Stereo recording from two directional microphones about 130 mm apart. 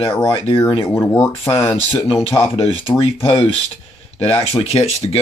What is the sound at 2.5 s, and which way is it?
Speech, 45° left (ahead or behind).